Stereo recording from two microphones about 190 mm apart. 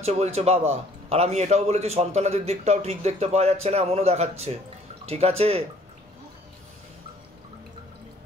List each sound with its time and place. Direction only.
0.0 s a man's voice: 35° right (ahead or behind)